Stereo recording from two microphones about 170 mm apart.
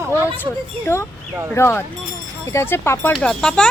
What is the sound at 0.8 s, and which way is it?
Speech, 15° left (ahead or behind).